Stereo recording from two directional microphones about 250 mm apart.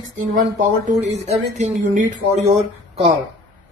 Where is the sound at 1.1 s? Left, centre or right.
Right.